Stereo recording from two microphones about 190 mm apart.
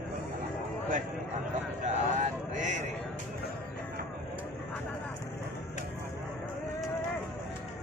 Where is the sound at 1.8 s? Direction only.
40° right (ahead or behind).